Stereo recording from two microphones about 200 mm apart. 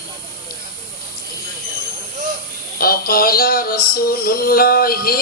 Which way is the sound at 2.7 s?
50° left (ahead or behind).